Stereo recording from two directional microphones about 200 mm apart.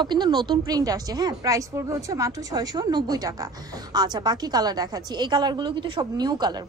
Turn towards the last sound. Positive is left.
turn(degrees=-20)  # may be behind; listen again after turning